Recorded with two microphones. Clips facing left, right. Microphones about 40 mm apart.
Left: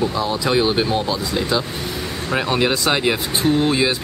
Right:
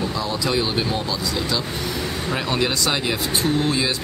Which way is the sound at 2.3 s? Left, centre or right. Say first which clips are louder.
Left 5 dB; centre.